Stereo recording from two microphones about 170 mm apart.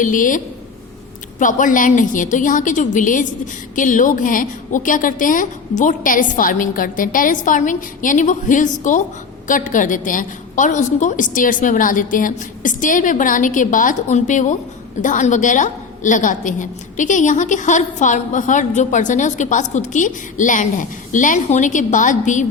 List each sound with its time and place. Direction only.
0.0 s a woman's voice: 50° left (ahead or behind)